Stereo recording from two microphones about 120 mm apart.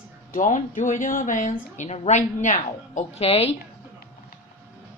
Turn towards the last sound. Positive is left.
turn(degrees=55)  # may be behind; listen again after turning